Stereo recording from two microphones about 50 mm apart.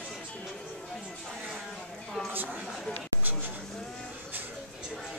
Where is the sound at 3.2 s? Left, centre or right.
Right.